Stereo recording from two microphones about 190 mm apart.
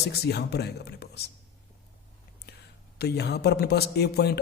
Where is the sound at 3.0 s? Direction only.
60° left (ahead or behind).